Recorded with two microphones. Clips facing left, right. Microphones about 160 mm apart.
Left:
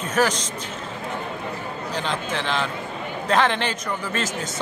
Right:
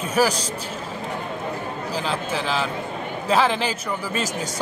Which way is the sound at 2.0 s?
5° right (ahead or behind).